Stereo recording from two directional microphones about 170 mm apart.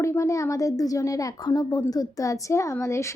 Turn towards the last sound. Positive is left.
turn(degrees=15)  # may be behind; listen again after turning